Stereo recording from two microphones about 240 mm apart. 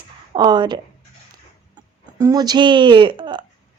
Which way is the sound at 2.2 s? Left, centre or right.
Centre.